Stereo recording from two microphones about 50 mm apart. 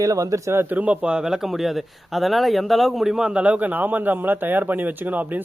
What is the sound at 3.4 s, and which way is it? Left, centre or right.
Speech, right.